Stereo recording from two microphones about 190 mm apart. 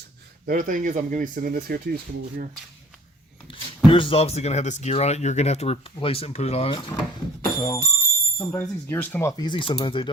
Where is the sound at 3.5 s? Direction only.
25° left (ahead or behind).